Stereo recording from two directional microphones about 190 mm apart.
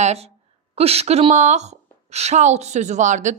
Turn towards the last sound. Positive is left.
turn(degrees=-40)  # may be behind; listen again after turning